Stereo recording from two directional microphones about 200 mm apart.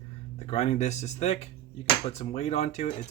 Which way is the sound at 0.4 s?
30° left (ahead or behind).